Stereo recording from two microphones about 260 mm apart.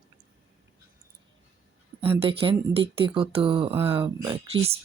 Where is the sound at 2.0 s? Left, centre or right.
Right.